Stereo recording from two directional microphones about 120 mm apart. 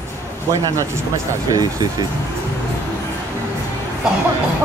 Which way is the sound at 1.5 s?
30° right (ahead or behind).